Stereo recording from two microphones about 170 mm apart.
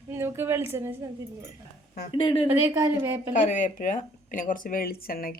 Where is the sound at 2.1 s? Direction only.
35° left (ahead or behind).